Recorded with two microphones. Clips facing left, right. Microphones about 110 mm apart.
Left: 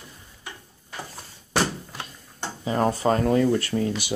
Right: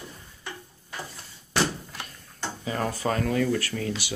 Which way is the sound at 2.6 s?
30° left (ahead or behind).